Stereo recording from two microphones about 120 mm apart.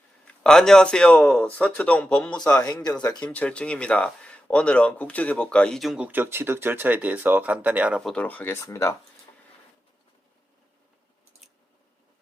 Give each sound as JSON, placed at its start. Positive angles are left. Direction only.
{"t": 0.3, "sound": "speech", "side_deg": 5}
{"t": 6.1, "sound": "speech", "side_deg": -15}
{"t": 8.0, "sound": "speech", "side_deg": 10}